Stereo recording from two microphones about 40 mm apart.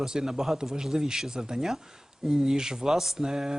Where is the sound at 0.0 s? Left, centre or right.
Centre.